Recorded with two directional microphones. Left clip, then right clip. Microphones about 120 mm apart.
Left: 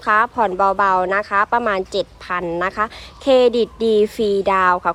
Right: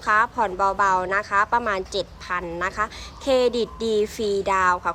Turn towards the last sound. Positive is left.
turn(degrees=10)  # may be behind; listen again after turning